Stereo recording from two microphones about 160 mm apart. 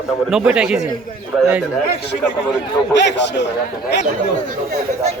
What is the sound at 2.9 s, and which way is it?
Speech, 90° left.